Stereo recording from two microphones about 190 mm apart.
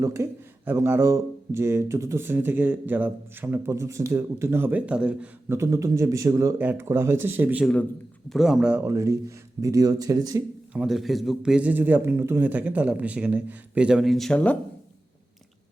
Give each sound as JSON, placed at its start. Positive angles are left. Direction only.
{"t": 0.0, "sound": "speech", "side_deg": -15}
{"t": 10.8, "sound": "speech", "side_deg": 0}